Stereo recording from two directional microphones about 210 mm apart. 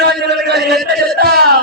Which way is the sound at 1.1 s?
50° right (ahead or behind).